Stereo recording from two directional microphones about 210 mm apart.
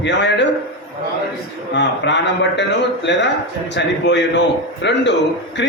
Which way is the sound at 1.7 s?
55° left (ahead or behind).